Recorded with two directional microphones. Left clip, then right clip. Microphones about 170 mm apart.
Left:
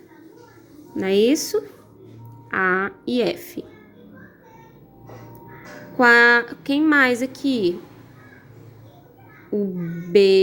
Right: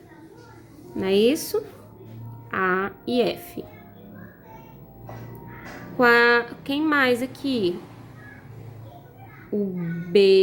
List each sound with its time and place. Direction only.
0.9 s a woman's voice: 30° left (ahead or behind)
6.0 s a woman's voice: 30° left (ahead or behind)
9.5 s a woman's voice: 25° left (ahead or behind)